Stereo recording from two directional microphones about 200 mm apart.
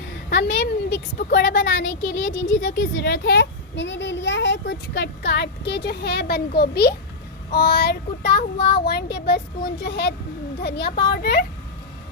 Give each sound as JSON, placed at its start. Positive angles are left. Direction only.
{"t": 0.3, "sound": "a child's voice", "side_deg": 60}